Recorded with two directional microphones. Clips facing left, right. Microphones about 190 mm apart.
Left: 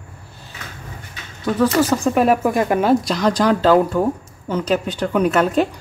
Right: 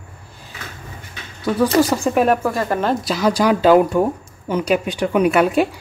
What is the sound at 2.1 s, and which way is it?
Speech, 5° left (ahead or behind).